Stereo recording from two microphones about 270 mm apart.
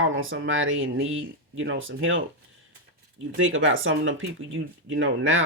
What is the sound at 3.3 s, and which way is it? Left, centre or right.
Speech, right.